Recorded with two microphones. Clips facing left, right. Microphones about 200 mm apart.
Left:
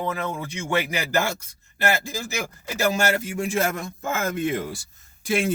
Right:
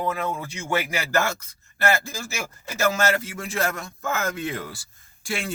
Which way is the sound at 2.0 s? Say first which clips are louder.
Left 3 dB; 15° left (ahead or behind).